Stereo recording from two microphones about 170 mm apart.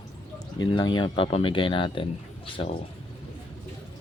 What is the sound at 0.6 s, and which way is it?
Speech, 25° left (ahead or behind).